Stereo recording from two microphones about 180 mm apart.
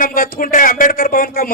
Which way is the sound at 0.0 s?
50° left (ahead or behind).